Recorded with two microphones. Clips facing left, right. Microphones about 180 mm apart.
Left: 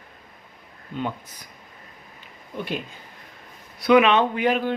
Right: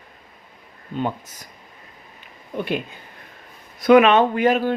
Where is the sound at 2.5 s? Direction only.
55° right (ahead or behind).